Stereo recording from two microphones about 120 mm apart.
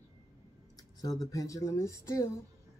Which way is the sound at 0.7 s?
30° left (ahead or behind).